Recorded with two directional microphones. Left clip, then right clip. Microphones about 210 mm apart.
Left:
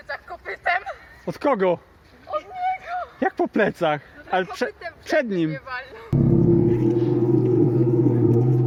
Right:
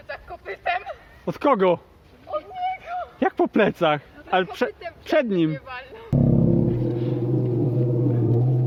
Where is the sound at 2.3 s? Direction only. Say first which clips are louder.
Left 1 dB; 20° right (ahead or behind).